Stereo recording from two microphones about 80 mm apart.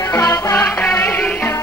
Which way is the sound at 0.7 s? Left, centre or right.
Left.